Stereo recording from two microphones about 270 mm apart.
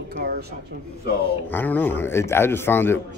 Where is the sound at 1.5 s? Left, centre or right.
Centre.